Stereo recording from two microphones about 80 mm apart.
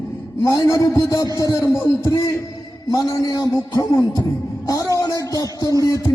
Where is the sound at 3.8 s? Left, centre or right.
Left.